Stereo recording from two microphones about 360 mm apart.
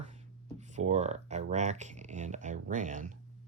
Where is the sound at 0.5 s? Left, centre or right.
Centre.